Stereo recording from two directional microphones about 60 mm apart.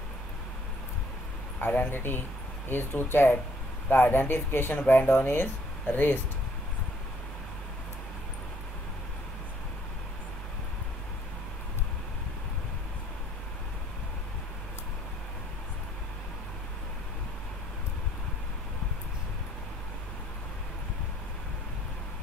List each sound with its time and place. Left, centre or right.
1.6 s speech: left